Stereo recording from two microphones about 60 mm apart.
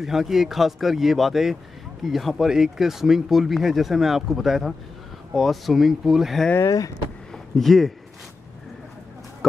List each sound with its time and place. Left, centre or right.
0.0 s speech: centre
6.6 s speech: left
7.5 s speech: centre